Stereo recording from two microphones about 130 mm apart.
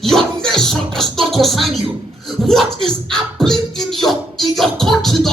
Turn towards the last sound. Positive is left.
turn(degrees=0)  # may be behind; listen again after turning